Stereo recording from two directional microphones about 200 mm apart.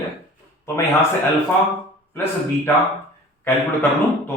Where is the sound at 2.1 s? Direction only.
10° left (ahead or behind).